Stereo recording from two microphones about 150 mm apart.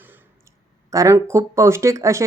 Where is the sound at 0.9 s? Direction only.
20° right (ahead or behind).